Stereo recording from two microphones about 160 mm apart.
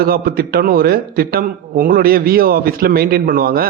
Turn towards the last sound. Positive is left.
turn(degrees=-65)  # may be behind; listen again after turning